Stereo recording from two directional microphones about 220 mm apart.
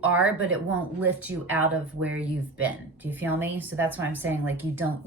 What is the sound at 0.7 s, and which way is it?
A woman's voice, 5° right (ahead or behind).